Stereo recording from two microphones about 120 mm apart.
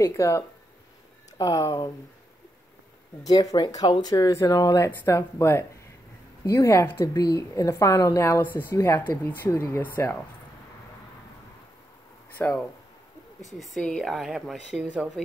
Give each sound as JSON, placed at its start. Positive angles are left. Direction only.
{"t": 0.0, "sound": "a woman's voice", "side_deg": 25}
{"t": 3.3, "sound": "a woman's voice", "side_deg": 35}
{"t": 12.4, "sound": "speech", "side_deg": 10}